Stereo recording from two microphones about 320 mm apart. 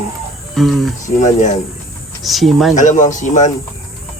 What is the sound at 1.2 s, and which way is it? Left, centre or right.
Speech, left.